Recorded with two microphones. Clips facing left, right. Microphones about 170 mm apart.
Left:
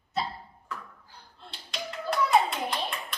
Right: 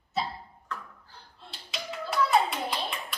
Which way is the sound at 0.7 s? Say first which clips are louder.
Right 1 dB; 10° left (ahead or behind).